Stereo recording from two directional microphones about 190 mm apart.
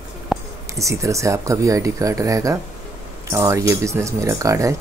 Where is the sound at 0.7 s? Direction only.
15° right (ahead or behind).